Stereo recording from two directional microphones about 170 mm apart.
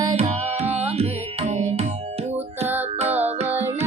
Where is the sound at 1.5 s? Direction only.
45° right (ahead or behind).